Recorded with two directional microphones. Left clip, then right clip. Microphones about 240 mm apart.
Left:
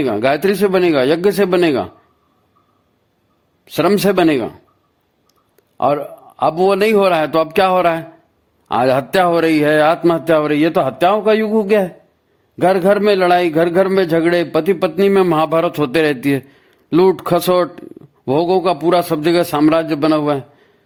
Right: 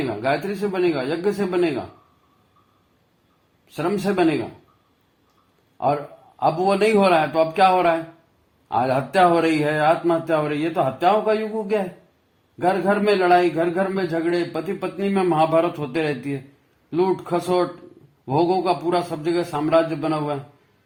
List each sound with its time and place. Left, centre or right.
0.2 s a man's voice: left
3.7 s a man's voice: left
6.4 s a man's voice: left